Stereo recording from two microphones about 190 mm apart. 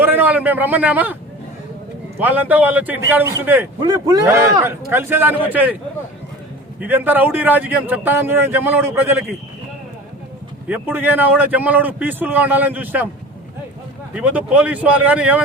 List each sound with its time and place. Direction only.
0.0 s a man's voice: 10° right (ahead or behind)
2.1 s a man's voice: 10° right (ahead or behind)
6.7 s a man's voice: 10° right (ahead or behind)
10.7 s a man's voice: 10° right (ahead or behind)
14.1 s a man's voice: 5° right (ahead or behind)